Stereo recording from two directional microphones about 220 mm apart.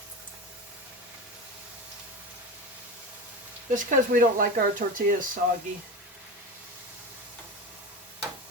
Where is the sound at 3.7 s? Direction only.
35° right (ahead or behind).